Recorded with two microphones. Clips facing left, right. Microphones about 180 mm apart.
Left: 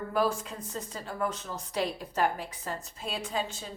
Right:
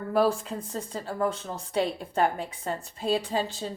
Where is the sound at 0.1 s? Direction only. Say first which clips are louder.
Right 5 dB; 35° right (ahead or behind).